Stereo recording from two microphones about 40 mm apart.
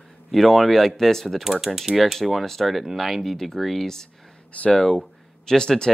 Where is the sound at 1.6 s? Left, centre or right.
Centre.